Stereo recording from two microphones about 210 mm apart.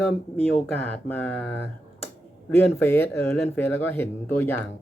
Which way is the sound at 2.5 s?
10° left (ahead or behind).